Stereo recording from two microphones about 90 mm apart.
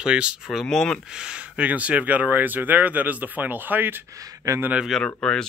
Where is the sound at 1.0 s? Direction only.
10° right (ahead or behind).